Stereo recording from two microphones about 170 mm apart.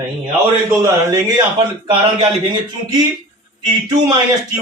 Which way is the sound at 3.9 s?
25° right (ahead or behind).